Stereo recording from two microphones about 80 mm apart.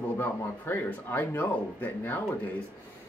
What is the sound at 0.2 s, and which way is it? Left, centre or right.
Speech, left.